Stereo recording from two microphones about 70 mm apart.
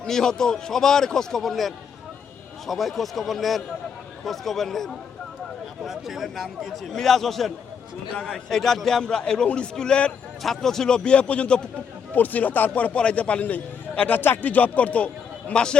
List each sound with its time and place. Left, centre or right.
0.0 s a man's voice: centre